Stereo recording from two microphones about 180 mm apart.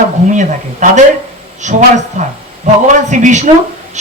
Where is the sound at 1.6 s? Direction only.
40° right (ahead or behind).